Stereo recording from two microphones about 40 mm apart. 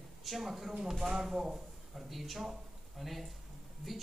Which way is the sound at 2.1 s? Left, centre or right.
Centre.